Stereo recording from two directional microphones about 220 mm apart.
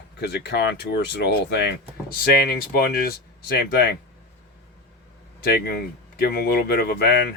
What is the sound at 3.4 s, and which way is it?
Speech, 45° left (ahead or behind).